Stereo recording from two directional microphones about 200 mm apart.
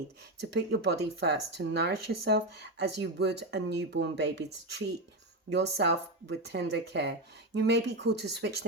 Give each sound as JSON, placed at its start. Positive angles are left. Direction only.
{"t": 0.5, "sound": "speech", "side_deg": -55}